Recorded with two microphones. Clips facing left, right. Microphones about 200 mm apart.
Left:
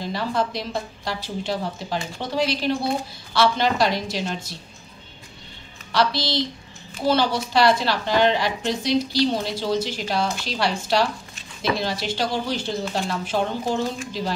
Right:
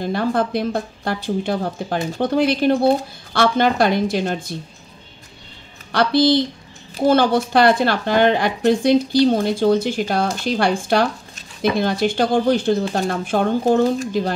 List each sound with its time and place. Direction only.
0.0 s speech: 55° right (ahead or behind)
5.9 s a woman's voice: 55° right (ahead or behind)